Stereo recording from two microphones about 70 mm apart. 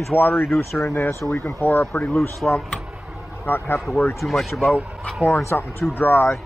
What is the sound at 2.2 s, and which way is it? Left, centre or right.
A man's voice, left.